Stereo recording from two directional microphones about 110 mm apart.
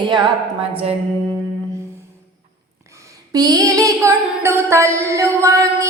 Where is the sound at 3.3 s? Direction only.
35° right (ahead or behind).